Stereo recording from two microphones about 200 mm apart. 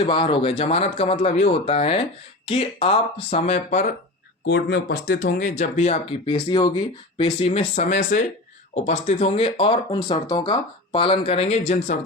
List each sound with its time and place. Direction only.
0.0 s speech: 25° left (ahead or behind)
4.4 s speech: 60° left (ahead or behind); by 11.9 s 35° left (ahead or behind)